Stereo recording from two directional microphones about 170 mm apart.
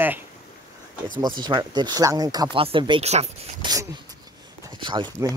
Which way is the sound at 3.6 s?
20° right (ahead or behind).